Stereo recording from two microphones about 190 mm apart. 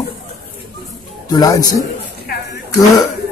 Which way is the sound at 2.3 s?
50° left (ahead or behind).